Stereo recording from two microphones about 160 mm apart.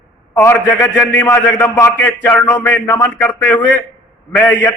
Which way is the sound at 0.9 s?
10° left (ahead or behind).